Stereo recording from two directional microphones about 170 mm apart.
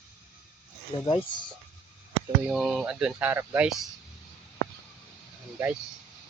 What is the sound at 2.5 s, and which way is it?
Speech, 5° right (ahead or behind).